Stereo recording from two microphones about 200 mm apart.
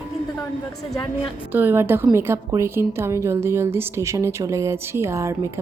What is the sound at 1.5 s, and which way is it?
A woman's voice, 10° right (ahead or behind).